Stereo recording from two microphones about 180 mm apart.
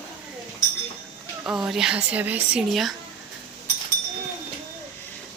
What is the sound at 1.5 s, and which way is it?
Speech, centre (ahead or behind).